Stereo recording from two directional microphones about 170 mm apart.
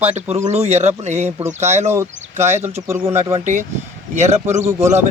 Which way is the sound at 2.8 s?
15° right (ahead or behind).